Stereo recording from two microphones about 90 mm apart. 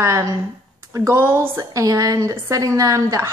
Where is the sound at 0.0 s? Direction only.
35° right (ahead or behind).